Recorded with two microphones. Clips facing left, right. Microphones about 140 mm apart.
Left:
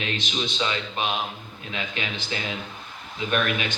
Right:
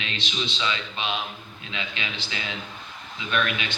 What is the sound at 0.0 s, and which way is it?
A man's voice, 45° left (ahead or behind).